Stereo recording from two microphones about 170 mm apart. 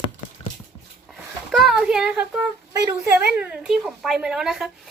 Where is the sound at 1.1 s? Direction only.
Centre (ahead or behind).